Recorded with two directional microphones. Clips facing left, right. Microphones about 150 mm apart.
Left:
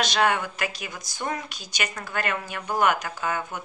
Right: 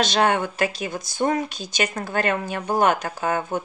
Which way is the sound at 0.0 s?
30° right (ahead or behind).